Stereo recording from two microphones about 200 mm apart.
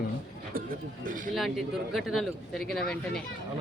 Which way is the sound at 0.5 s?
45° right (ahead or behind).